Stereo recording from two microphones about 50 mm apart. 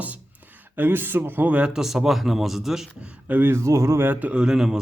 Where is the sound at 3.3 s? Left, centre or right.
Right.